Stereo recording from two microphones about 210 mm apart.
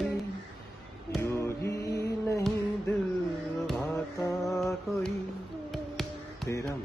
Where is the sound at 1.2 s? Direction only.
15° left (ahead or behind).